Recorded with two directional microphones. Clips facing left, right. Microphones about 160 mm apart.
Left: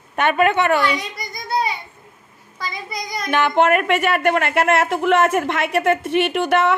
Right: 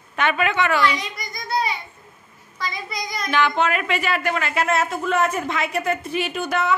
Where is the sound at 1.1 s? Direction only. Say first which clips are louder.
Left 2 dB; 30° left (ahead or behind).